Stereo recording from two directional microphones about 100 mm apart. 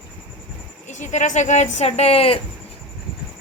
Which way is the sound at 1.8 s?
90° left.